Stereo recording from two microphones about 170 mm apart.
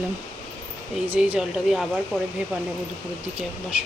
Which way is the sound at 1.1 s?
10° right (ahead or behind).